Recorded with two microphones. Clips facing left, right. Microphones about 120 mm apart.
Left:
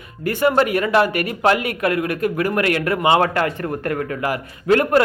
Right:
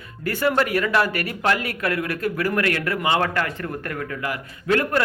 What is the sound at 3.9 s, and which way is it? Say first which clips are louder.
Speech: left 6 dB; 45° left (ahead or behind).